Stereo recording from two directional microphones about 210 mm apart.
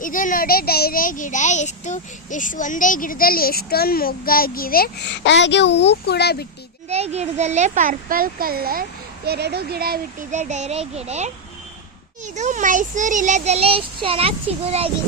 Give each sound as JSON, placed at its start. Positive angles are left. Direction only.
{"t": 0.0, "sound": "a child's voice", "side_deg": 40}
{"t": 6.8, "sound": "a child's voice", "side_deg": -30}